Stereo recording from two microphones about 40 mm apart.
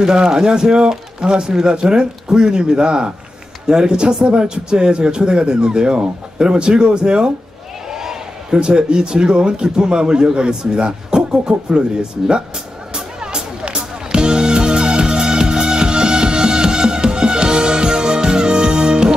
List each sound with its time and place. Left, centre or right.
0.0 s a man's voice: centre
7.9 s a sound: centre
8.5 s a man's voice: right
12.9 s music: centre